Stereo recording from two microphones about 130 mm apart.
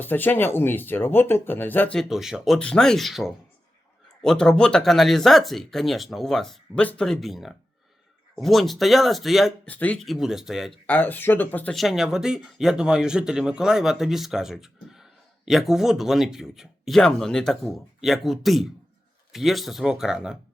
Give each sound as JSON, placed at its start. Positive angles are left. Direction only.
{"t": 0.0, "sound": "speech", "side_deg": 15}
{"t": 2.0, "sound": "speech", "side_deg": 0}
{"t": 9.6, "sound": "speech", "side_deg": 10}
{"t": 10.0, "sound": "speech", "side_deg": 0}
{"t": 10.8, "sound": "speech", "side_deg": 15}
{"t": 11.7, "sound": "speech", "side_deg": 0}